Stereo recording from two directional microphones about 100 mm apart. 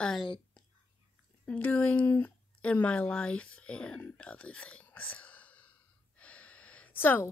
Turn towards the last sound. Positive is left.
turn(degrees=20)  # may be behind; listen again after turning